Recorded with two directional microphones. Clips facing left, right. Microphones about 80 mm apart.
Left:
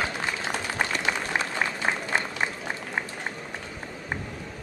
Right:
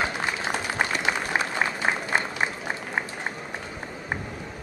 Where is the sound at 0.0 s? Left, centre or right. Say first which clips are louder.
Right 2 dB; centre.